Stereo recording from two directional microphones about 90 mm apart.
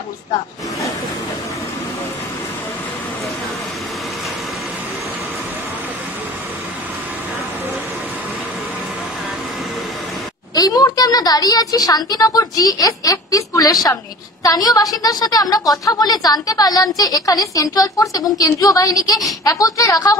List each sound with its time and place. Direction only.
10.5 s a woman's voice: 45° left (ahead or behind)